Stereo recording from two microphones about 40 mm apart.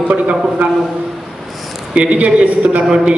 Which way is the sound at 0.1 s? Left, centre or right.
Right.